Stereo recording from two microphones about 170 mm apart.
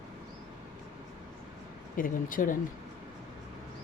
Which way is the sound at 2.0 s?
55° left (ahead or behind).